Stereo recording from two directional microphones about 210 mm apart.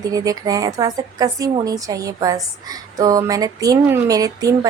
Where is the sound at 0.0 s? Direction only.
15° right (ahead or behind).